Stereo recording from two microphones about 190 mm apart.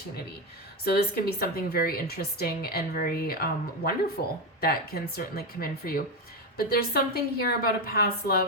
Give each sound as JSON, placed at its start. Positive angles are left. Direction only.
{"t": 0.9, "sound": "a woman's voice", "side_deg": 55}